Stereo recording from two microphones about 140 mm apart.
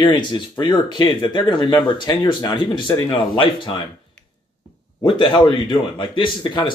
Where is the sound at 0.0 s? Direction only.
35° left (ahead or behind).